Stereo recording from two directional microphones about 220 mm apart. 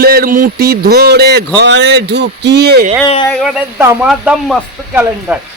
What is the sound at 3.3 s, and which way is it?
A woman's voice, centre (ahead or behind).